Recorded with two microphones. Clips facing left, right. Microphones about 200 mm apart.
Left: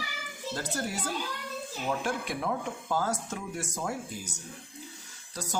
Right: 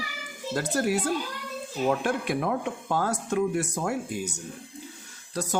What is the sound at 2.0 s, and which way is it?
Speech, 60° right (ahead or behind).